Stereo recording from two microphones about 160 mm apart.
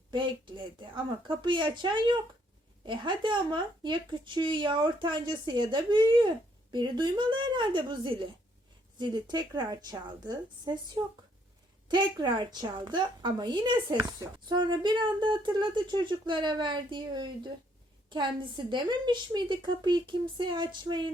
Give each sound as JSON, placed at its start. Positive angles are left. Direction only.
{"t": 0.1, "sound": "speech", "side_deg": -30}
{"t": 11.9, "sound": "speech", "side_deg": -30}